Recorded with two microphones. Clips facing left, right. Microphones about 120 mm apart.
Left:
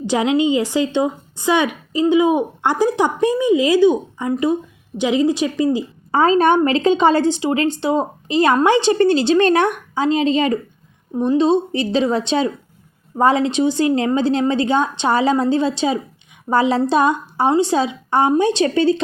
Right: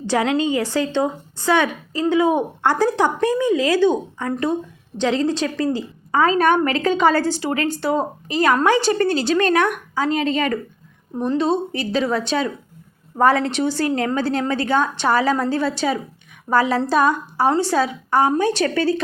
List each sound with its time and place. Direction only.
0.0 s a woman's voice: 15° left (ahead or behind)
6.1 s a woman's voice: 30° left (ahead or behind)
11.7 s a woman's voice: 25° left (ahead or behind)